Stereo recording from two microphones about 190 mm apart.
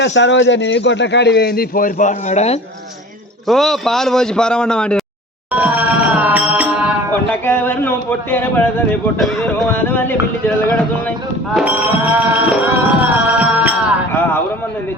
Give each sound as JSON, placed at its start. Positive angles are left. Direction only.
{"t": 0.0, "sound": "a man's voice", "side_deg": 70}
{"t": 3.4, "sound": "a man's voice", "side_deg": 0}
{"t": 5.5, "sound": "music", "side_deg": -10}
{"t": 7.3, "sound": "a sound", "side_deg": 10}
{"t": 9.1, "sound": "a man's voice", "side_deg": 0}
{"t": 9.7, "sound": "a sound", "side_deg": 10}
{"t": 11.5, "sound": "music", "side_deg": -10}